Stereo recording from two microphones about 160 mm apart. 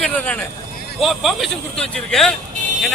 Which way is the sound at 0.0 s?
10° left (ahead or behind).